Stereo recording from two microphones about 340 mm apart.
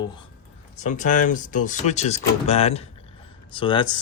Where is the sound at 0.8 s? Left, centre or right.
Left.